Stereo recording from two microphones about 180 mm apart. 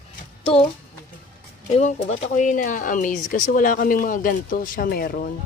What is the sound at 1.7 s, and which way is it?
Speech, 35° left (ahead or behind).